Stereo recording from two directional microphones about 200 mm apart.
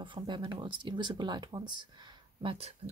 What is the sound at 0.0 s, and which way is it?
Speech, 25° right (ahead or behind).